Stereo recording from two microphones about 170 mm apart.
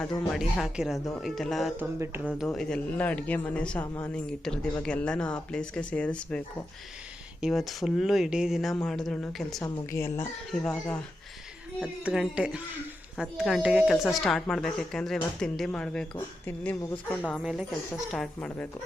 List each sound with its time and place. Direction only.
0.3 s speech: centre (ahead or behind)
1.8 s speech: 10° right (ahead or behind)
2.4 s speech: 5° left (ahead or behind)
7.4 s speech: centre (ahead or behind)
9.6 s speech: 20° left (ahead or behind)
10.5 s speech: 5° left (ahead or behind)
17.4 s speech: 5° right (ahead or behind)